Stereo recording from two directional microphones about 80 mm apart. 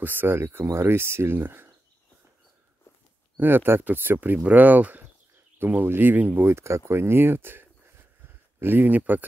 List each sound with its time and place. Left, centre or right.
0.0 s speech: right
3.3 s speech: right